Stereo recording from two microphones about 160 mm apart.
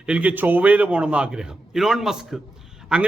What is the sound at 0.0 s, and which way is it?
A man's voice, 10° right (ahead or behind).